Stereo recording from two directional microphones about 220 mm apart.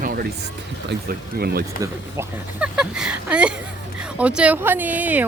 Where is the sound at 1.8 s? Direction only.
10° right (ahead or behind).